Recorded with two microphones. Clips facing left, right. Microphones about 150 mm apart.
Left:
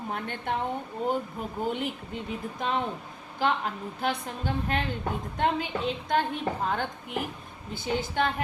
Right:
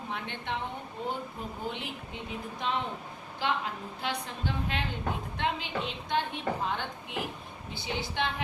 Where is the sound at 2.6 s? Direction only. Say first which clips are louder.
Left 3 dB; 45° left (ahead or behind).